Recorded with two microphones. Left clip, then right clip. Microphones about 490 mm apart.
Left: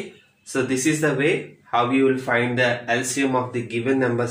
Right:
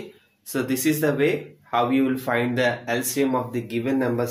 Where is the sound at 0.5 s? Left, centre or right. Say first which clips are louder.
Left 2 dB; right.